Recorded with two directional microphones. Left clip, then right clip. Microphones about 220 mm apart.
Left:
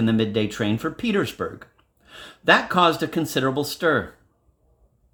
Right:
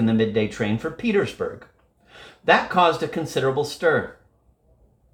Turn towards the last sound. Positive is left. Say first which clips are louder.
# right 1 dB
turn(degrees=45)  # may be behind; listen again after turning